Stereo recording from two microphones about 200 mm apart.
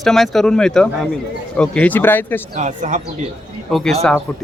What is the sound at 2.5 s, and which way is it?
Speech, 35° right (ahead or behind).